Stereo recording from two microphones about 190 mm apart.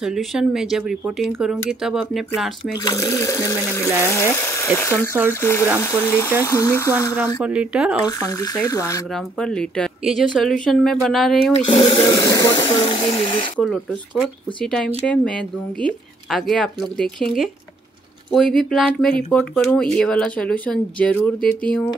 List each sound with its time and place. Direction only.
0.0 s speech: centre (ahead or behind)
2.8 s speech: 20° left (ahead or behind)
7.4 s speech: 5° right (ahead or behind)
8.0 s speech: 20° left (ahead or behind)
9.1 s speech: 5° left (ahead or behind)
11.6 s speech: 30° left (ahead or behind)
13.6 s speech: centre (ahead or behind)